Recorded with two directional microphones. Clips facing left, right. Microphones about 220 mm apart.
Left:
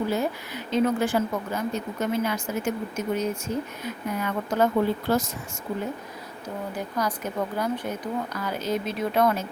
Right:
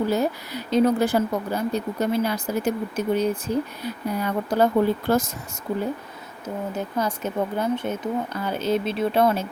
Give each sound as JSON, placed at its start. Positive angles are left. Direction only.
{"t": 0.1, "sound": "speech", "side_deg": -40}
{"t": 5.0, "sound": "speech", "side_deg": -50}
{"t": 6.7, "sound": "speech", "side_deg": -25}